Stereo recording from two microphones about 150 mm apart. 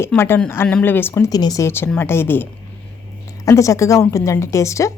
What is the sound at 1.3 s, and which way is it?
A woman's voice, 25° left (ahead or behind).